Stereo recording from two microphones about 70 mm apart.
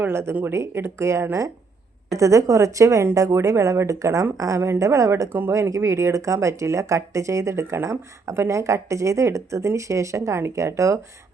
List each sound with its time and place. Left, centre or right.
0.1 s speech: right
5.3 s speech: right
5.5 s speech: right